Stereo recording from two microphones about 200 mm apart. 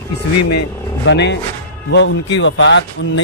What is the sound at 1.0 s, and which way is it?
A man's voice, 60° left (ahead or behind).